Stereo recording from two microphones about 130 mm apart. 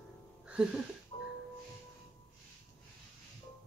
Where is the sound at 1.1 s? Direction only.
40° left (ahead or behind).